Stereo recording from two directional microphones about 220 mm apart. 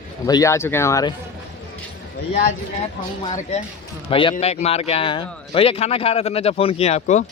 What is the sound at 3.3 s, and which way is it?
Speech, 30° left (ahead or behind).